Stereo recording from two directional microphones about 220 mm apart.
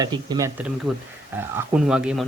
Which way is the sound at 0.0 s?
20° right (ahead or behind).